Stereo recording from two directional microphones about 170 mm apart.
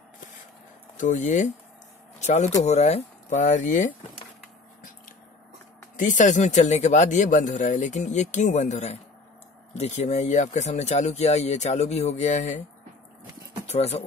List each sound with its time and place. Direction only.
0.9 s speech: 45° left (ahead or behind)
5.9 s speech: 50° left (ahead or behind)
13.7 s speech: 40° left (ahead or behind)